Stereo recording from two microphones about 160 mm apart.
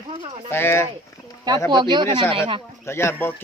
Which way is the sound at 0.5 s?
15° left (ahead or behind).